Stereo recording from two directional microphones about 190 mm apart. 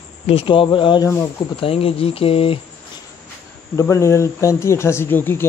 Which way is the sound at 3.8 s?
15° left (ahead or behind).